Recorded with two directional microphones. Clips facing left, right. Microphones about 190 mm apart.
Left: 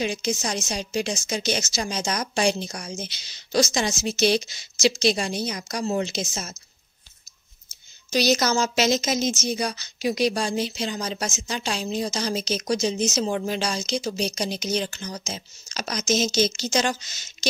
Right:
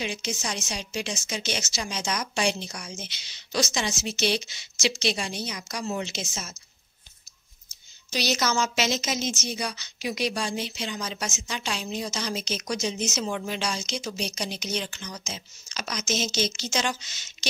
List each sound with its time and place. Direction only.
0.0 s a woman's voice: 40° left (ahead or behind)
8.1 s a woman's voice: 40° left (ahead or behind)